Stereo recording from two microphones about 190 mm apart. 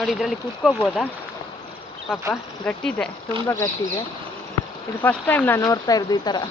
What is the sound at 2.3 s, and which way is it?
Speech, 5° left (ahead or behind).